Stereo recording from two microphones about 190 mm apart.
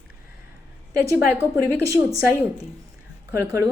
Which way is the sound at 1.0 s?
15° right (ahead or behind).